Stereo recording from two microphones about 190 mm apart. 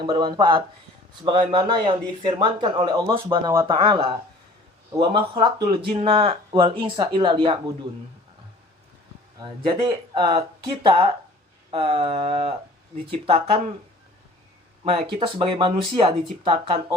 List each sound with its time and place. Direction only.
0.0 s speech: 25° right (ahead or behind)
9.4 s speech: 25° right (ahead or behind)
14.8 s speech: 30° right (ahead or behind)